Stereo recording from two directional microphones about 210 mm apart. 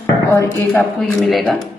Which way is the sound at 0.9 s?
Centre (ahead or behind).